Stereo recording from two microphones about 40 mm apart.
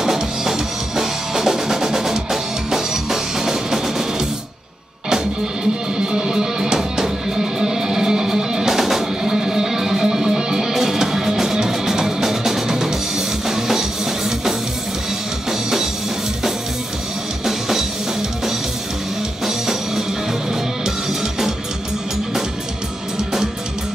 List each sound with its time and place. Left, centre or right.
0.0 s music: centre
5.1 s music: right
17.5 s drum kit: centre
19.4 s music: centre
23.1 s music: centre